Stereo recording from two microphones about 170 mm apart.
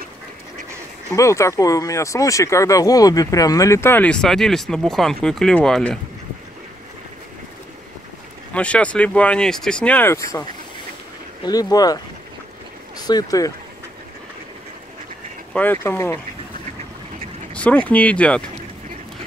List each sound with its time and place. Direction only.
1.1 s speech: 20° left (ahead or behind)
8.5 s speech: 5° left (ahead or behind)
11.4 s speech: 20° left (ahead or behind)
15.5 s speech: 10° left (ahead or behind)
17.6 s speech: 10° left (ahead or behind)